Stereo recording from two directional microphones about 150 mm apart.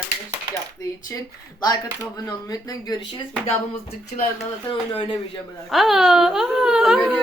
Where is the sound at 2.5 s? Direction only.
25° left (ahead or behind).